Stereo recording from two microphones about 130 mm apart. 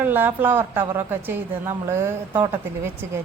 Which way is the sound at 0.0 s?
15° right (ahead or behind).